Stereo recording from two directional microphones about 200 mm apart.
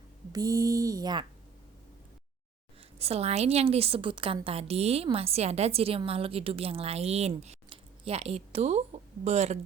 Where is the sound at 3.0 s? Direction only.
30° right (ahead or behind).